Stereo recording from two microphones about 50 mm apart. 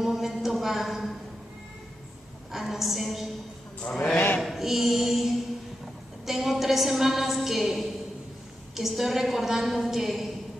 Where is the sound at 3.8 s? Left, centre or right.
Left.